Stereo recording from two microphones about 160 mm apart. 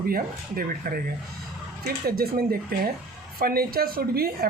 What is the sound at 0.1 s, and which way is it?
A woman's voice, 65° right (ahead or behind).